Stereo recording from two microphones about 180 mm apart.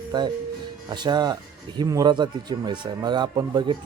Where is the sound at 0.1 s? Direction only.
25° right (ahead or behind).